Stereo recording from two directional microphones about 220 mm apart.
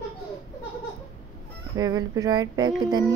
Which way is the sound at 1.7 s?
15° right (ahead or behind).